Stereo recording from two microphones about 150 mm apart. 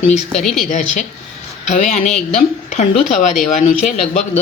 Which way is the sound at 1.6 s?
55° left (ahead or behind).